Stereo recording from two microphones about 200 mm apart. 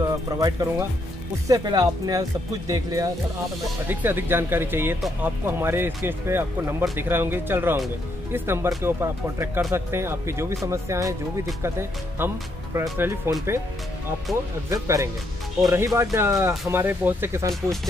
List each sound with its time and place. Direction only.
0.0 s speech: 20° right (ahead or behind)
14.3 s speech: centre (ahead or behind)
14.7 s speech: 15° right (ahead or behind)